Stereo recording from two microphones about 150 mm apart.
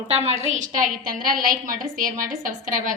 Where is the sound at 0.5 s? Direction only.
60° right (ahead or behind).